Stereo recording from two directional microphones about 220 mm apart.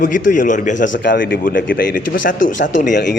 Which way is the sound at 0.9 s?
55° left (ahead or behind).